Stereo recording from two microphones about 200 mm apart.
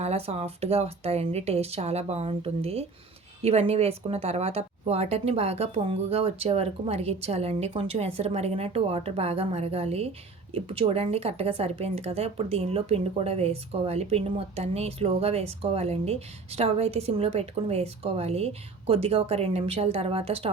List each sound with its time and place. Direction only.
0.0 s speech: 30° right (ahead or behind)